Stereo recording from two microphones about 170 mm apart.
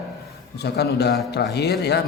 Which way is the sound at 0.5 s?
75° left (ahead or behind).